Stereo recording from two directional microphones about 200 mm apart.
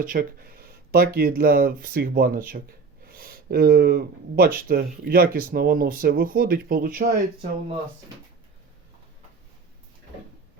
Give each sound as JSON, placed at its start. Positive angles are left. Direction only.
{"t": 0.0, "sound": "speech", "side_deg": -45}